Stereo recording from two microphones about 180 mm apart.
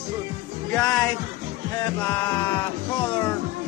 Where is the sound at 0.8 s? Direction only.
20° left (ahead or behind).